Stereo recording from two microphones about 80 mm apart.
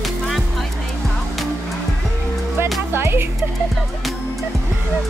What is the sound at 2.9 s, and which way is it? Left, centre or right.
Music, right.